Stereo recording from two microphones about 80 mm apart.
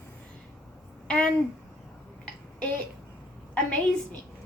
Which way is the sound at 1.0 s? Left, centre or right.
Centre.